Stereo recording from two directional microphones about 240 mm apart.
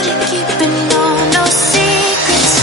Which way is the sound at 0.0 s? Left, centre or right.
Centre.